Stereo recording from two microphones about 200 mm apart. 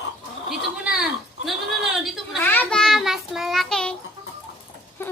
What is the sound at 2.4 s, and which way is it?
Child singing, 10° left (ahead or behind).